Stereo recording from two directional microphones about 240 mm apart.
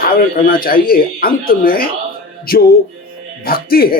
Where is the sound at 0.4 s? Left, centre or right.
Left.